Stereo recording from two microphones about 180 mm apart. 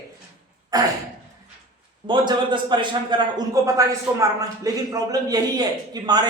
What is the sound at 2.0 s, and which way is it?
A man's voice, 25° right (ahead or behind).